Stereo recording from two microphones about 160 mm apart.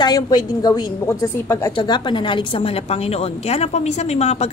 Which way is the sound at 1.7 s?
30° left (ahead or behind).